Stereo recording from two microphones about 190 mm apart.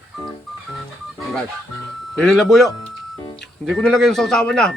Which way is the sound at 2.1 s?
Centre (ahead or behind).